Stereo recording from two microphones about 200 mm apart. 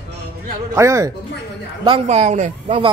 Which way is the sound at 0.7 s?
15° right (ahead or behind).